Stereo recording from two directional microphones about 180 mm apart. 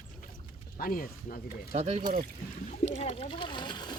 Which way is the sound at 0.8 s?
50° left (ahead or behind).